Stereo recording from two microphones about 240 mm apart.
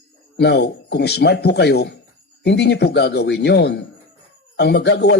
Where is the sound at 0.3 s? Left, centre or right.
Left.